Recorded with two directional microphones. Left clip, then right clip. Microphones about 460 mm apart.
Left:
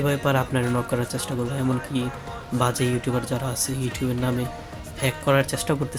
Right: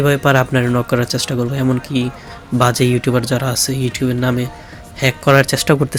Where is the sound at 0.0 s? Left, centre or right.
Left.